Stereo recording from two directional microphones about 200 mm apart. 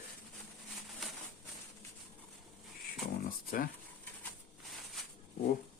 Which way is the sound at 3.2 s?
45° left (ahead or behind).